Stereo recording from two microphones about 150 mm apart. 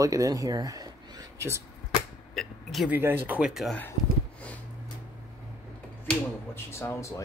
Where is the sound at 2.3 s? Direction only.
Centre (ahead or behind).